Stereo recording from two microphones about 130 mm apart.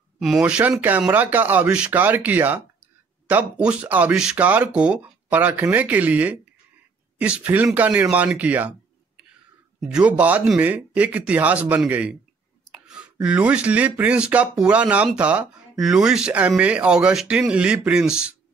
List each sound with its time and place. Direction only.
0.5 s speech: 10° right (ahead or behind)
9.8 s speech: 5° right (ahead or behind)